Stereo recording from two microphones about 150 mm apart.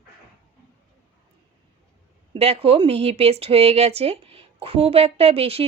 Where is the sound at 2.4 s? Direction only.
40° right (ahead or behind).